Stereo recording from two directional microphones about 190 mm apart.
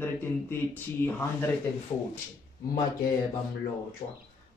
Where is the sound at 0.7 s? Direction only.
10° left (ahead or behind).